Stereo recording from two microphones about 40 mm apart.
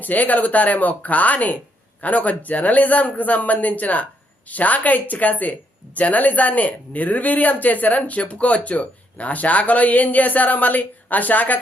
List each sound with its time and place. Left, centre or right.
0.0 s a man's voice: left